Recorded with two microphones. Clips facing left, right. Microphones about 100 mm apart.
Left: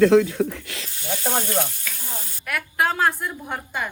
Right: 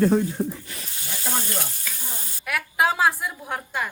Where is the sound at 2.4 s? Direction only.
Centre (ahead or behind).